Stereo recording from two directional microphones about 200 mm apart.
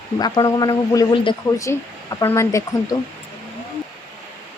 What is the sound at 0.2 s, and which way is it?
A man's voice, 20° left (ahead or behind).